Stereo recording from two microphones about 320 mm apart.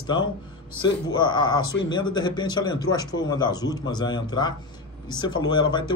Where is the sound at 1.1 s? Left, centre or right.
Centre.